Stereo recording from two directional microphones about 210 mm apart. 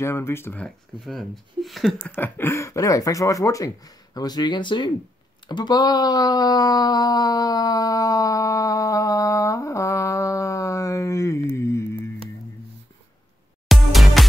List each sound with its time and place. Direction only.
0.0 s speech: 10° left (ahead or behind)
2.1 s speech: 10° left (ahead or behind)
5.5 s a sound: 20° left (ahead or behind)
13.7 s music: centre (ahead or behind)